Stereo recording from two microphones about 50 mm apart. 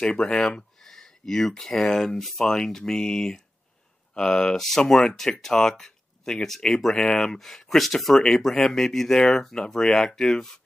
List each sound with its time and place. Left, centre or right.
0.0 s speech: centre
0.8 s speech: centre